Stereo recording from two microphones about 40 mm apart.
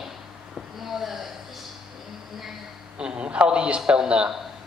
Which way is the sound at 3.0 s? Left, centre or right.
Right.